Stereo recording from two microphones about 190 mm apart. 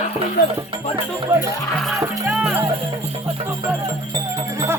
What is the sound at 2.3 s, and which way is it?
Music, 5° right (ahead or behind).